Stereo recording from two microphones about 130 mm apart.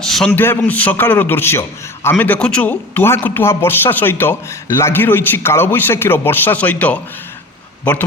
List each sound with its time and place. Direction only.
0.0 s a man's voice: 5° left (ahead or behind)
0.3 s a man's voice: 15° left (ahead or behind)